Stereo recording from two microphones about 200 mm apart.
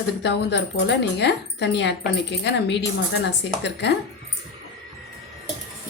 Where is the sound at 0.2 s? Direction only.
60° left (ahead or behind).